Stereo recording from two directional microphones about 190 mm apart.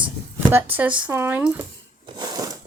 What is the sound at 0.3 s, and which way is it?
Speech, 10° right (ahead or behind).